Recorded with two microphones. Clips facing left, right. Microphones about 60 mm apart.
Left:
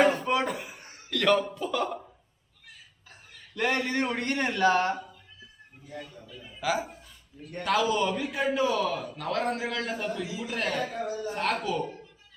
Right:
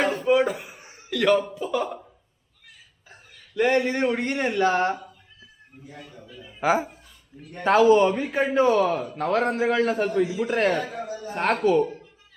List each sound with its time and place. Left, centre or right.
0.0 s a sound: centre
1.5 s speech: centre
3.1 s a sound: centre
3.7 s a man's voice: centre
6.3 s speech: centre
6.6 s a man's voice: right